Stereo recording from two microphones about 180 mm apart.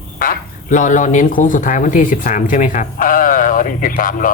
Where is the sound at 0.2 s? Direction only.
50° left (ahead or behind).